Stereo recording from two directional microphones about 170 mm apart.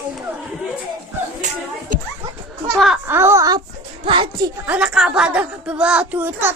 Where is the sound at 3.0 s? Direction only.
15° right (ahead or behind).